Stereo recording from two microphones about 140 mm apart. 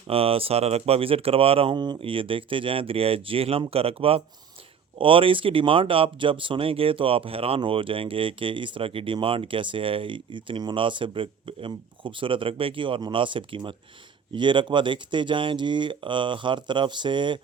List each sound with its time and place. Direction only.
0.1 s speech: 45° right (ahead or behind)